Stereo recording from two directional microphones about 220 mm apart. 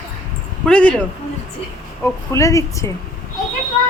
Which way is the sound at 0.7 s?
5° left (ahead or behind).